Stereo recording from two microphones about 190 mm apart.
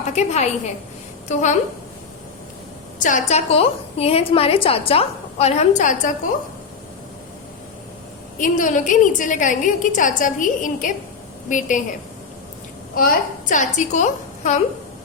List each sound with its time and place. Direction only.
0.1 s a woman's voice: 35° left (ahead or behind)
3.0 s a woman's voice: 40° left (ahead or behind)
8.4 s a woman's voice: 45° left (ahead or behind)
12.9 s a woman's voice: 50° left (ahead or behind)